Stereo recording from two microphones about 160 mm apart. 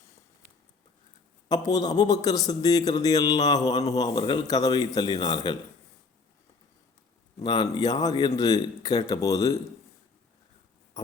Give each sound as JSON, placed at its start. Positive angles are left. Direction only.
{"t": 1.5, "sound": "a man's voice", "side_deg": 25}
{"t": 7.4, "sound": "a man's voice", "side_deg": 25}